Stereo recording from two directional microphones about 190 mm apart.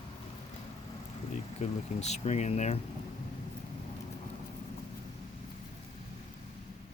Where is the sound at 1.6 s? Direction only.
35° left (ahead or behind).